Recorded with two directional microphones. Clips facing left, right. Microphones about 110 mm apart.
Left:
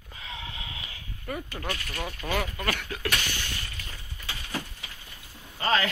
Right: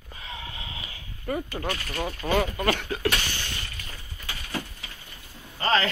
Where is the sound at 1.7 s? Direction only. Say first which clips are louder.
Right 4 dB; 35° right (ahead or behind).